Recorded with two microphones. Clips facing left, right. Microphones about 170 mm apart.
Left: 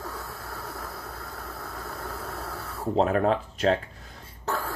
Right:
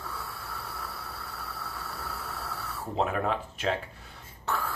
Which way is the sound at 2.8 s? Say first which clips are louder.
Left 6 dB; 40° left (ahead or behind).